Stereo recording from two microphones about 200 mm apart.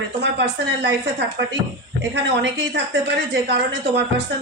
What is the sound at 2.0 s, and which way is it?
A woman's voice, 60° right (ahead or behind).